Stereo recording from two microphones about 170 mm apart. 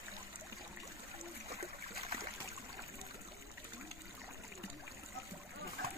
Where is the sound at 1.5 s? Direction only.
35° right (ahead or behind).